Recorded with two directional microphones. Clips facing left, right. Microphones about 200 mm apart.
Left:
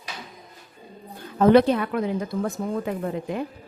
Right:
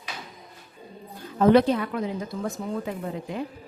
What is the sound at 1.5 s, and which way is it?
A woman's voice, 60° left (ahead or behind).